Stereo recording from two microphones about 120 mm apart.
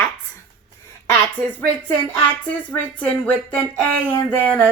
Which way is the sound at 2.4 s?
10° left (ahead or behind).